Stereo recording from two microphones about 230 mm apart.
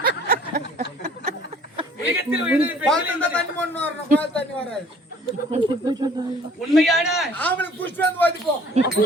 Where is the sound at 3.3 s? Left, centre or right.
Centre.